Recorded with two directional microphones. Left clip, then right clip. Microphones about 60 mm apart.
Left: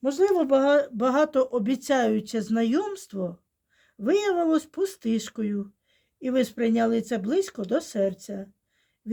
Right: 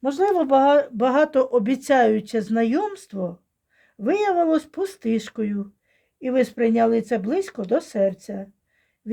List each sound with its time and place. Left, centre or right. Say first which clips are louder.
0.0 s speech: right 2 dB; right
1.0 s speech: right 4 dB; right
2.1 s speech: right 5 dB; right
3.8 s speech: right 2 dB; right